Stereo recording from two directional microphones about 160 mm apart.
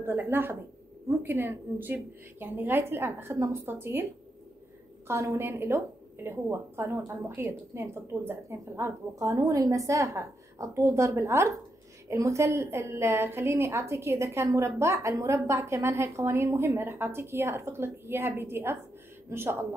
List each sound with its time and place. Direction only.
0.0 s a woman's voice: 15° right (ahead or behind)
5.0 s a woman's voice: 15° right (ahead or behind)